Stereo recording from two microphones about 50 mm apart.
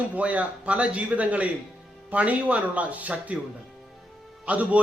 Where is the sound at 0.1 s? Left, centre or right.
Right.